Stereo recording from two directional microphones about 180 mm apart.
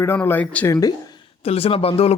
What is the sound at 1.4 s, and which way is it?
Speech, 35° left (ahead or behind).